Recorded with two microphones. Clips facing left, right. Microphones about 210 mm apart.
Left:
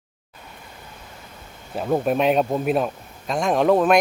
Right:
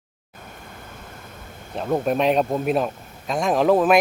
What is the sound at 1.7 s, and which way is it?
Speech, 5° left (ahead or behind).